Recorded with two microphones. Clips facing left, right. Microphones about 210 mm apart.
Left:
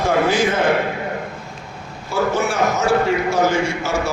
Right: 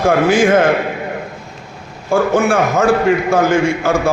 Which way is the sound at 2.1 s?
50° right (ahead or behind).